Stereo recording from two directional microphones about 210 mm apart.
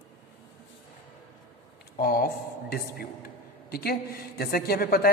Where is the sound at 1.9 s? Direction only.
45° left (ahead or behind).